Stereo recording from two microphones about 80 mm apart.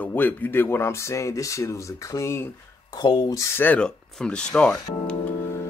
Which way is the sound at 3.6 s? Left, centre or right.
Centre.